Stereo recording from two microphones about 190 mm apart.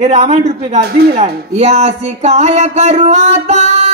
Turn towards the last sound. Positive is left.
turn(degrees=-35)  # may be behind; listen again after turning